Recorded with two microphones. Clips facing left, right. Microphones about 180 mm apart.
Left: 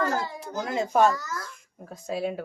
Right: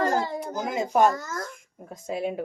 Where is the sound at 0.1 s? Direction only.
15° right (ahead or behind).